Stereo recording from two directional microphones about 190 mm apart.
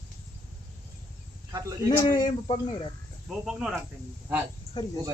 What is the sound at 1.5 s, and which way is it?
Speech, 15° right (ahead or behind).